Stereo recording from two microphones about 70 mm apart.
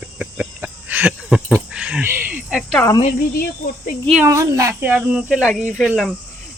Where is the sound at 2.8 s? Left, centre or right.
Left.